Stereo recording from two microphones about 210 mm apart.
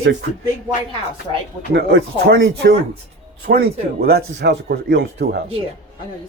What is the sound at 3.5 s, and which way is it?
Speech, 45° right (ahead or behind).